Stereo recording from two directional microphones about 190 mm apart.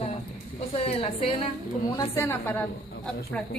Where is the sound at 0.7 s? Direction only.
30° left (ahead or behind).